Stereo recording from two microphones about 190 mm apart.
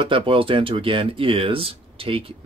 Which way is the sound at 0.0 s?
25° right (ahead or behind).